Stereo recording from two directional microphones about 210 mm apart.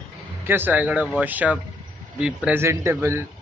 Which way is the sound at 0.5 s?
10° right (ahead or behind).